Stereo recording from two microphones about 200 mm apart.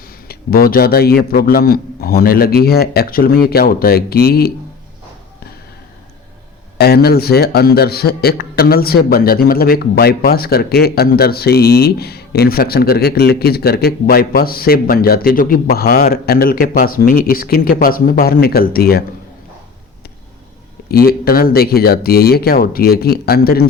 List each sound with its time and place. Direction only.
0.3 s a man's voice: 50° left (ahead or behind)
6.7 s a man's voice: 50° left (ahead or behind)
20.9 s a man's voice: 50° left (ahead or behind)